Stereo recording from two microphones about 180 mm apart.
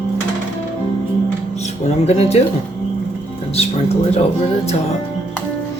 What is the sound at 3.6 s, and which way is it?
Speech, 35° left (ahead or behind).